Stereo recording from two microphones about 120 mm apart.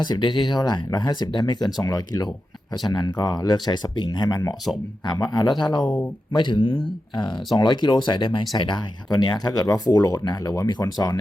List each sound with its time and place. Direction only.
0.0 s speech: 40° left (ahead or behind)
5.8 s speech: 10° left (ahead or behind)
6.3 s speech: 40° left (ahead or behind)